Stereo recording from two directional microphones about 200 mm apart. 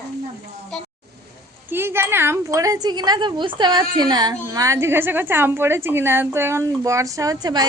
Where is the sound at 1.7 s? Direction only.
10° right (ahead or behind).